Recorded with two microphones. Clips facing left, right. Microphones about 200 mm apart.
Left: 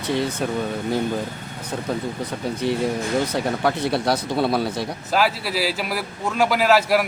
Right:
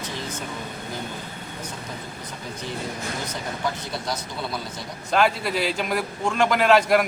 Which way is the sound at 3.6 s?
65° left (ahead or behind).